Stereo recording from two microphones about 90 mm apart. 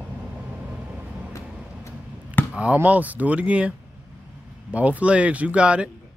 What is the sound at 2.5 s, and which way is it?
Speech, 15° right (ahead or behind).